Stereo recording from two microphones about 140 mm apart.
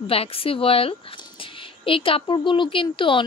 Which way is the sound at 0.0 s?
40° left (ahead or behind).